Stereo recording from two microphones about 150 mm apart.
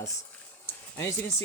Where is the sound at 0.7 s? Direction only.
15° left (ahead or behind).